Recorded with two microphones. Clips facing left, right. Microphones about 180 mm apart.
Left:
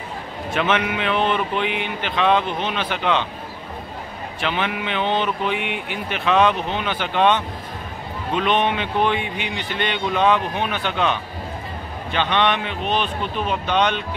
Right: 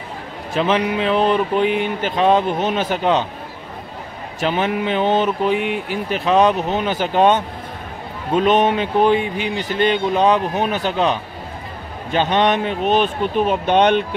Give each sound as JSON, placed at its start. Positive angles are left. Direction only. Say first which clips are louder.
{"t": 0.5, "sound": "speech", "louder": "right 3 dB", "side_deg": -35}
{"t": 4.4, "sound": "speech", "louder": "right 5 dB", "side_deg": -40}